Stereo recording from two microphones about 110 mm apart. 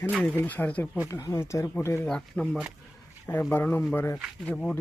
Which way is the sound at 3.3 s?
15° left (ahead or behind).